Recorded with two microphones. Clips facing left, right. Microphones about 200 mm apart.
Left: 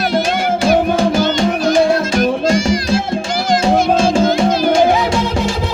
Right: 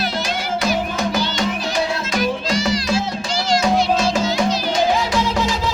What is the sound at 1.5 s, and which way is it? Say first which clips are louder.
Music: left 9 dB; 50° left (ahead or behind).